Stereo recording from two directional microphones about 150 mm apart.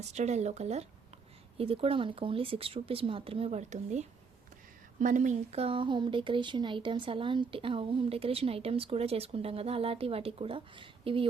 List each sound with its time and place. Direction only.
0.0 s speech: 45° right (ahead or behind)